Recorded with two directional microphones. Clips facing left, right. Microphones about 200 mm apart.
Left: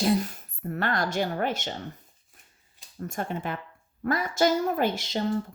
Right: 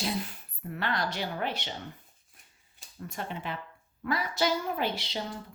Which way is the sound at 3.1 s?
50° left (ahead or behind).